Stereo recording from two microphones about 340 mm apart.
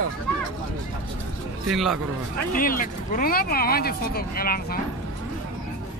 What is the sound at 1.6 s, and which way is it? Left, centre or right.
Speech, centre.